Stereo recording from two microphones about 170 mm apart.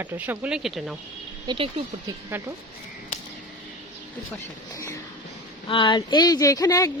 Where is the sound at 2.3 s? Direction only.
10° right (ahead or behind).